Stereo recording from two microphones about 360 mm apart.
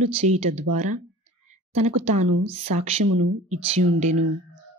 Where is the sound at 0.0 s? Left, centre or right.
Centre.